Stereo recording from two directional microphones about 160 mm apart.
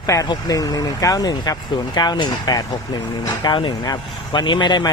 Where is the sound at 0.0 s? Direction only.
20° left (ahead or behind).